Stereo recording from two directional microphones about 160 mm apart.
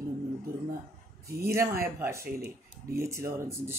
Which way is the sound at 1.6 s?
65° right (ahead or behind).